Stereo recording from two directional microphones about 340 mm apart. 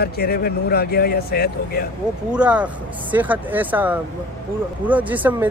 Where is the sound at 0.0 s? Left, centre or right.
Left.